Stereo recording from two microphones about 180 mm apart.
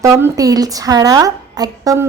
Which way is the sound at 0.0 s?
15° right (ahead or behind).